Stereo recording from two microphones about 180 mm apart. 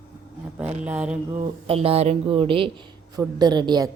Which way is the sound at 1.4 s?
35° right (ahead or behind).